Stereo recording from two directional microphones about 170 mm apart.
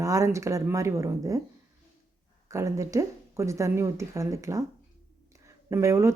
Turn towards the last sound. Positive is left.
turn(degrees=-15)  # may be behind; listen again after turning